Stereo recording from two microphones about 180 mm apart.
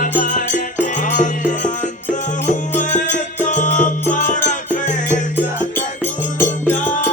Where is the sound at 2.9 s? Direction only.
45° left (ahead or behind).